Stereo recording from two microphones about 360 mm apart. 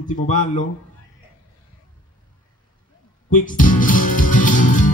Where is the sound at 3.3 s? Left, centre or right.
Left.